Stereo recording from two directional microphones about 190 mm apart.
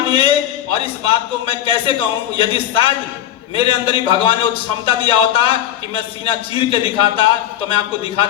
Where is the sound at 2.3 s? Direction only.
30° left (ahead or behind).